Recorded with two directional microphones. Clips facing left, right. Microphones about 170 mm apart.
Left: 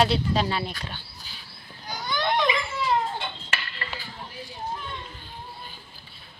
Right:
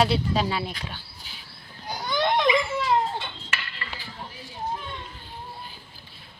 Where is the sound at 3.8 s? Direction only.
40° left (ahead or behind).